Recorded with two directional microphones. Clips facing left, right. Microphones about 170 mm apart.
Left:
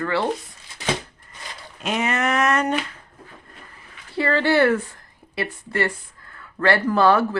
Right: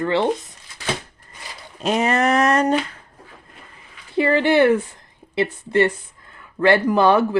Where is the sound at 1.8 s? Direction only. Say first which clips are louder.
Right 5 dB; 35° right (ahead or behind).